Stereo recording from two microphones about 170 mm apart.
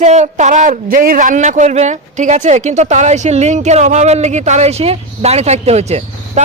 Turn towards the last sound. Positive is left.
turn(degrees=-40)  # may be behind; listen again after turning